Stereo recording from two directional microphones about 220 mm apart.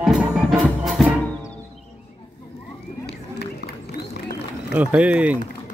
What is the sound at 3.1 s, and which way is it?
Run, 50° left (ahead or behind).